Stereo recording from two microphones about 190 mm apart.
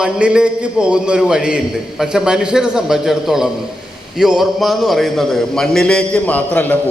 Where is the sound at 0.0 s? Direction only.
5° right (ahead or behind).